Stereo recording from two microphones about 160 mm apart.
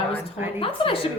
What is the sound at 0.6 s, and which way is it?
Speech, 35° left (ahead or behind).